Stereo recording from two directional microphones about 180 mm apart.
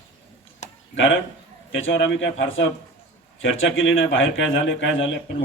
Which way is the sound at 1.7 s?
90° left.